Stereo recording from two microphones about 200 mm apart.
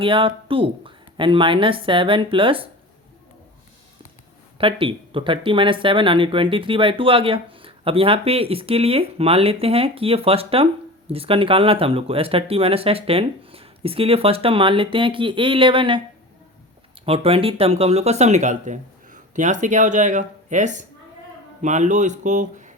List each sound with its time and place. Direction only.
0.0 s speech: 25° right (ahead or behind)
4.5 s speech: 25° right (ahead or behind)
17.1 s speech: 30° right (ahead or behind)